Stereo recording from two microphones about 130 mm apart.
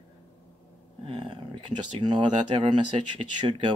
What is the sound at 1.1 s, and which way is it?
Speech, 40° right (ahead or behind).